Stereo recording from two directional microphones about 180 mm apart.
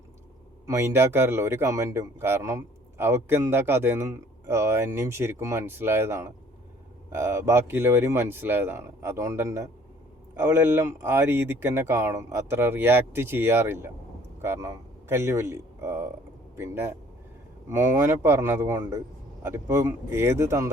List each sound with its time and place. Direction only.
0.7 s speech: 15° right (ahead or behind)